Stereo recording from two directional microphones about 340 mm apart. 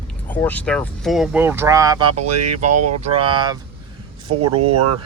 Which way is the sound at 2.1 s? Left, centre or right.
Right.